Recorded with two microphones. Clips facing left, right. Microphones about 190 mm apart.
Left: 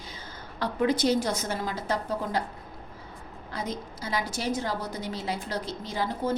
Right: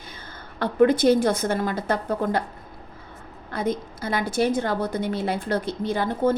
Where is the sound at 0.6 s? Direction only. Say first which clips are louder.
Right 7 dB; 55° right (ahead or behind).